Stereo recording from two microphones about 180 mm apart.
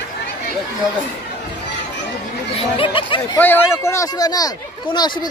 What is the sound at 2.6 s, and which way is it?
Speech, 30° left (ahead or behind).